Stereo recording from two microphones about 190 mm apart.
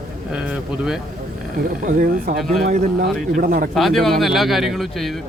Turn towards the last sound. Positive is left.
turn(degrees=0)  # may be behind; listen again after turning